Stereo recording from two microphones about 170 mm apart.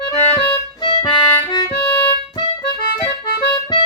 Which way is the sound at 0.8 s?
25° left (ahead or behind).